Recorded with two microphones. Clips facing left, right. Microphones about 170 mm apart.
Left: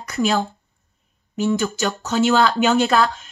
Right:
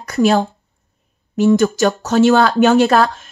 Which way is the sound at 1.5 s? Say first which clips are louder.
Right 8 dB; 45° right (ahead or behind).